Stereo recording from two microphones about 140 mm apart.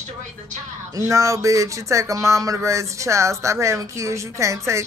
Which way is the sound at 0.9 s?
20° right (ahead or behind).